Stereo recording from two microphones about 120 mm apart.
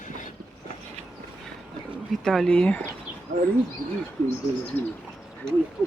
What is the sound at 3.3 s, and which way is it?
Speech, 90° right.